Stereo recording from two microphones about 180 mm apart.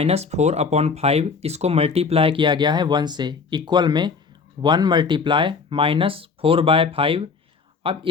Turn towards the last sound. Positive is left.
turn(degrees=-30)  # may be behind; listen again after turning